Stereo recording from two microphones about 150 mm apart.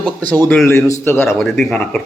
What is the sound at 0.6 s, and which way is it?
Speech, 20° left (ahead or behind).